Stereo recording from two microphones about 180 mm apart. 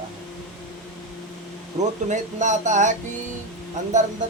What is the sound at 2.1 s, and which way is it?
A man's voice, 40° right (ahead or behind).